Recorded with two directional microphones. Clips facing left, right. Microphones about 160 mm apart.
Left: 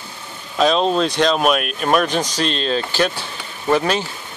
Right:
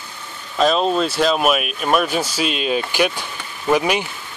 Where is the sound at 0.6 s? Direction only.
5° right (ahead or behind).